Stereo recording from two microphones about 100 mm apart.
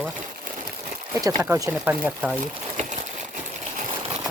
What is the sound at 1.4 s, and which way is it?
Speech, 30° right (ahead or behind).